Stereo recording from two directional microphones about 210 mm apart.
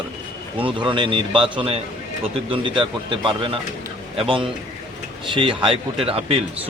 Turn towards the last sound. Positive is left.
turn(degrees=-25)  # may be behind; listen again after turning